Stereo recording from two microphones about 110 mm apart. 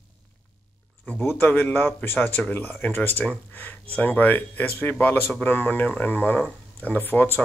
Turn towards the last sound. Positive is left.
turn(degrees=15)  # may be behind; listen again after turning